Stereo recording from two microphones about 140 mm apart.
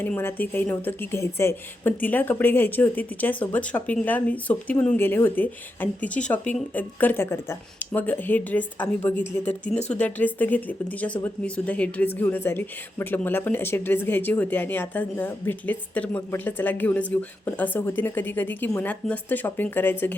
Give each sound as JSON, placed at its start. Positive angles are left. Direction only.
{"t": 0.0, "sound": "speech", "side_deg": 15}
{"t": 9.4, "sound": "speech", "side_deg": 55}
{"t": 9.9, "sound": "speech", "side_deg": 10}